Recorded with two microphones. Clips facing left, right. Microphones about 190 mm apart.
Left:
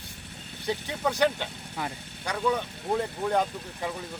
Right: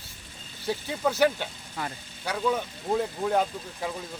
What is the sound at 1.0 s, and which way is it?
Speech, 5° right (ahead or behind).